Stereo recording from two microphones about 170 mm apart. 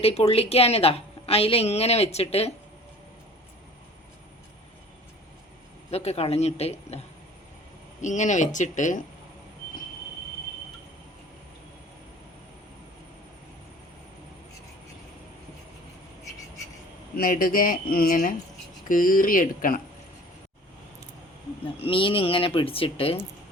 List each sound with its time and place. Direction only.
0.0 s a woman's voice: 35° left (ahead or behind)
5.9 s a woman's voice: 40° left (ahead or behind)
8.0 s speech: 45° left (ahead or behind)
17.2 s speech: 55° left (ahead or behind)
21.8 s a woman's voice: 30° left (ahead or behind)